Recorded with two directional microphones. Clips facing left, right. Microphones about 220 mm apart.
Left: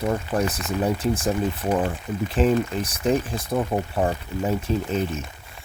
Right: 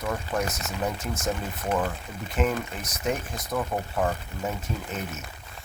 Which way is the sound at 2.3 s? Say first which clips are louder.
Left 6 dB; 30° left (ahead or behind).